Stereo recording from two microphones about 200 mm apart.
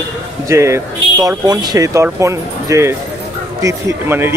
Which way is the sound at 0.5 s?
15° right (ahead or behind).